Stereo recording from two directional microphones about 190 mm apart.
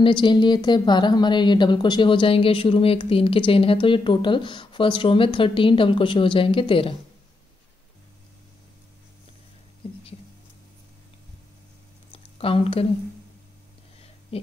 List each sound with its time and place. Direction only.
0.0 s a woman's voice: 25° left (ahead or behind)
12.4 s speech: 30° left (ahead or behind)
14.3 s a sound: 30° left (ahead or behind)